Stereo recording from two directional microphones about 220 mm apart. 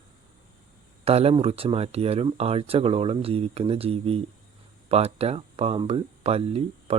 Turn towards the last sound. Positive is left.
turn(degrees=-25)  # may be behind; listen again after turning